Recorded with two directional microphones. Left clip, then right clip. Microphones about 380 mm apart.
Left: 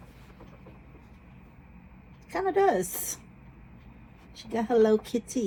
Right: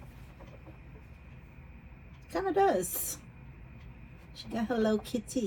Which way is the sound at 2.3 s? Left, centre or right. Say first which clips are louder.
Left 3 dB; centre.